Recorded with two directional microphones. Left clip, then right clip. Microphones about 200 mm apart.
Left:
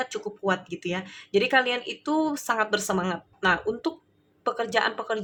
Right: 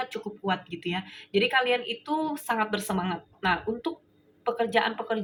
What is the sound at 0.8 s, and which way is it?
A woman's voice, 45° left (ahead or behind).